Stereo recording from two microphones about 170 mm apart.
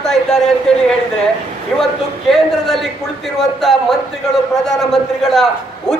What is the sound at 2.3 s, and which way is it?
A man's voice, centre (ahead or behind).